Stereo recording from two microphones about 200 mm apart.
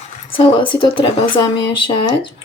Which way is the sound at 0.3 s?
25° left (ahead or behind).